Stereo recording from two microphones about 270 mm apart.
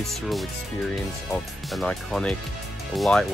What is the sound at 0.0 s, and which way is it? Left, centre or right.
Speech, centre.